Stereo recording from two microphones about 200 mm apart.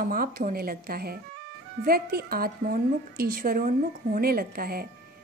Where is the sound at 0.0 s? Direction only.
45° right (ahead or behind).